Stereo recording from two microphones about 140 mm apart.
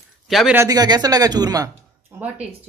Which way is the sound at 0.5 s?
25° right (ahead or behind).